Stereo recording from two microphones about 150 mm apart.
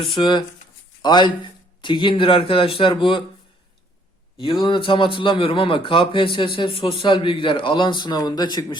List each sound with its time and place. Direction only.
0.0 s a man's voice: 35° left (ahead or behind)
4.4 s a man's voice: 35° left (ahead or behind)